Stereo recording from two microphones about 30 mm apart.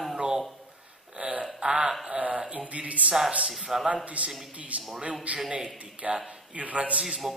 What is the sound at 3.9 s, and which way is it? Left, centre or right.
Speech, right.